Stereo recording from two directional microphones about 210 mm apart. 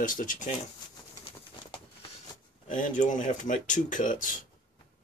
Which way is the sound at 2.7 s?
35° left (ahead or behind).